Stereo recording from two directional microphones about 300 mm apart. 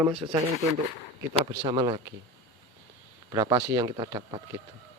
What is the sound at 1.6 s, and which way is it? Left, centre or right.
Speech, centre.